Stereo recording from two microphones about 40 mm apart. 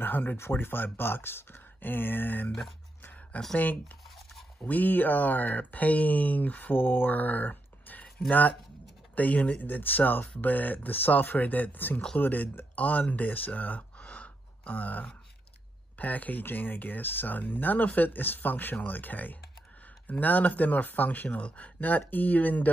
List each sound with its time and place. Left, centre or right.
0.0 s a sound: left
0.4 s speech: left
3.5 s speech: left
21.4 s speech: left
21.7 s speech: left